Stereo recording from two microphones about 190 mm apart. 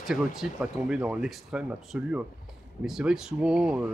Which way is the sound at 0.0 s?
5° right (ahead or behind).